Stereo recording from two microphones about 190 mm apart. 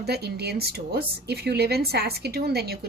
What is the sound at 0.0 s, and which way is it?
A woman's voice, 60° right (ahead or behind).